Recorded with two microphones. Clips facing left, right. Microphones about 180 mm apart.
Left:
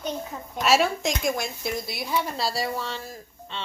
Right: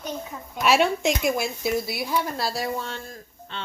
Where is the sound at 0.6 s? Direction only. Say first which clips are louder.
Right 1 dB; centre (ahead or behind).